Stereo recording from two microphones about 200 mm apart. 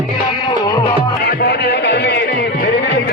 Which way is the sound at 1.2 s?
50° left (ahead or behind).